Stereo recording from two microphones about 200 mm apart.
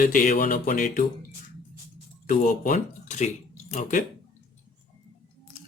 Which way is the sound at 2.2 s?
40° left (ahead or behind).